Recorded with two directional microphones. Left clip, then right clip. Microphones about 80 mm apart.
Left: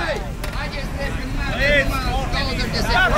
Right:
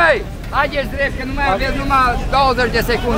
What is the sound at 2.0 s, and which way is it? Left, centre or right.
Speech, right.